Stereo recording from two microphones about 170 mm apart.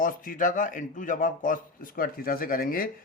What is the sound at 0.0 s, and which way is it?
Speech, 55° left (ahead or behind).